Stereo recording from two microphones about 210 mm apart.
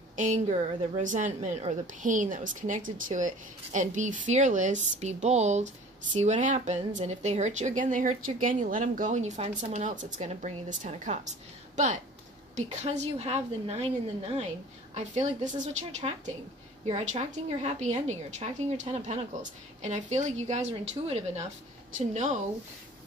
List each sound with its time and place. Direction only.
0.2 s a woman's voice: 35° right (ahead or behind)
15.0 s a woman's voice: 35° right (ahead or behind)